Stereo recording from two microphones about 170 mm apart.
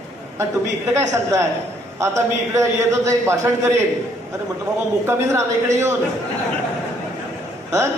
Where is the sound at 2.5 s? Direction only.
15° right (ahead or behind).